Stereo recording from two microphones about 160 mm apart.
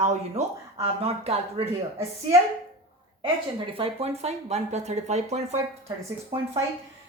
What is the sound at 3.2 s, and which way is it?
A woman's voice, 35° right (ahead or behind).